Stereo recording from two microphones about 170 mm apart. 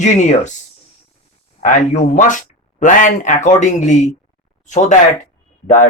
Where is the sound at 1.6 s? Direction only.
45° left (ahead or behind).